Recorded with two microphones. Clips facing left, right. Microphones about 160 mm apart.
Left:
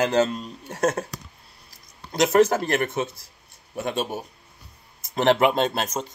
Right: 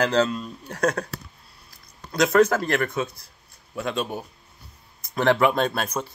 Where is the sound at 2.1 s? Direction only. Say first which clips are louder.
Even; 25° left (ahead or behind).